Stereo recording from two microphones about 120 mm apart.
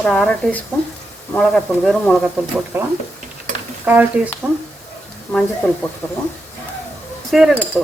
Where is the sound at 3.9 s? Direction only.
15° right (ahead or behind).